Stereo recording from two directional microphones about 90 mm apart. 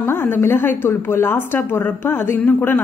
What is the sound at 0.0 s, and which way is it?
A woman's voice, 25° left (ahead or behind).